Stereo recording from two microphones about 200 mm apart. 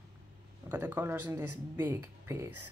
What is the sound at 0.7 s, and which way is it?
Speech, 10° right (ahead or behind).